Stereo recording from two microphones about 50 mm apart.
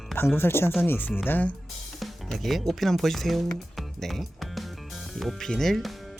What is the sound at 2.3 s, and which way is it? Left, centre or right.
Speech, centre.